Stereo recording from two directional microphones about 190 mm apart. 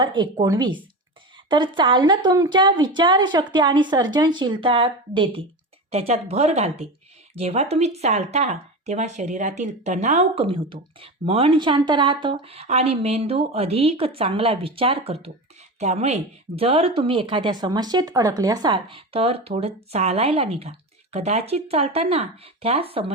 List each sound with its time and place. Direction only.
0.0 s a woman's voice: 25° right (ahead or behind)